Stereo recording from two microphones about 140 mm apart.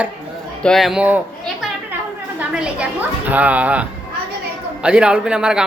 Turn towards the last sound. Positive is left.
turn(degrees=-5)  # may be behind; listen again after turning